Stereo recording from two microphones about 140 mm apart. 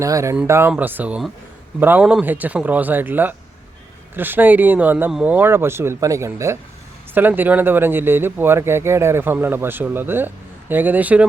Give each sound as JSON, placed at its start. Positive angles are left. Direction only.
{"t": 0.0, "sound": "speech", "side_deg": -20}